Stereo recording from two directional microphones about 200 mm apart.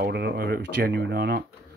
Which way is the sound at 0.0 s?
55° right (ahead or behind).